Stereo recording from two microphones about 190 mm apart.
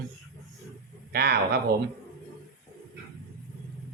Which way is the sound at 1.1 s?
55° right (ahead or behind).